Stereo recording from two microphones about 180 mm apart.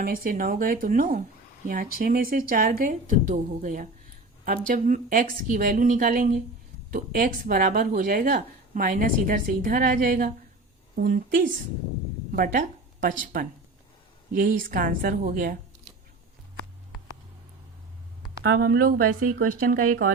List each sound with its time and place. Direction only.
0.0 s a woman's voice: 55° right (ahead or behind)
18.2 s a woman's voice: 60° right (ahead or behind)